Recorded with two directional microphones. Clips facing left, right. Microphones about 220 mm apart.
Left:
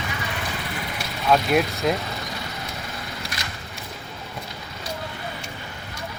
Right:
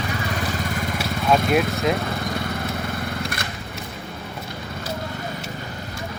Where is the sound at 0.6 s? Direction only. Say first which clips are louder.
Right 6 dB; 45° right (ahead or behind).